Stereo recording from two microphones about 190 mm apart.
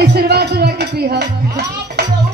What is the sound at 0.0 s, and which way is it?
Music, 60° right (ahead or behind).